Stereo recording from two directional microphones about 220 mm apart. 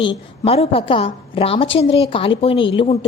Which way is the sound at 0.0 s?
25° left (ahead or behind).